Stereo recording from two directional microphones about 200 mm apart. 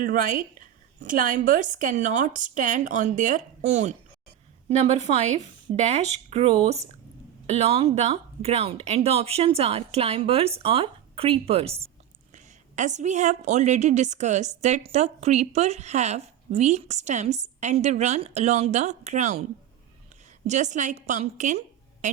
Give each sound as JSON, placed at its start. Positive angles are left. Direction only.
{"t": 0.0, "sound": "a woman's voice", "side_deg": -45}
{"t": 20.5, "sound": "a woman's voice", "side_deg": -35}